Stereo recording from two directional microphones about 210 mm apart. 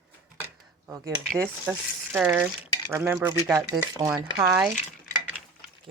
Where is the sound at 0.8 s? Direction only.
15° right (ahead or behind).